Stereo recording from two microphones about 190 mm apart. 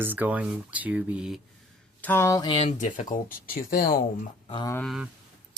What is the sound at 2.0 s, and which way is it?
Speech, 10° left (ahead or behind).